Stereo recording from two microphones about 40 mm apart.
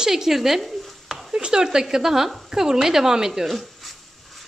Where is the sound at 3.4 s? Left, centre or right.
Centre.